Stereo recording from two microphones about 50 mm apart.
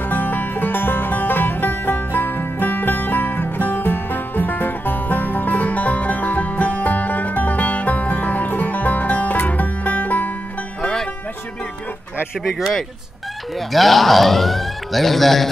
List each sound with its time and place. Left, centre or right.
0.0 s music: left
10.8 s music: centre
12.5 s speech: centre